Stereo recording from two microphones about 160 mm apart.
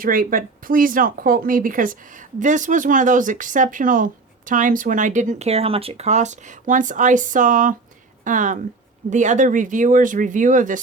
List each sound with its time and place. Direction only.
0.0 s speech: 60° right (ahead or behind)